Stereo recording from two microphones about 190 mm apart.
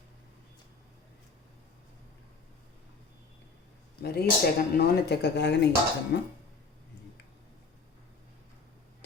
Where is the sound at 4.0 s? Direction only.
55° left (ahead or behind).